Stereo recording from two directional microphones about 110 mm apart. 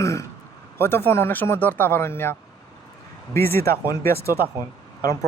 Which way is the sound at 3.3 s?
20° left (ahead or behind).